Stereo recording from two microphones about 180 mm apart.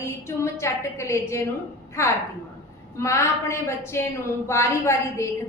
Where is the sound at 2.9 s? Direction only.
15° left (ahead or behind).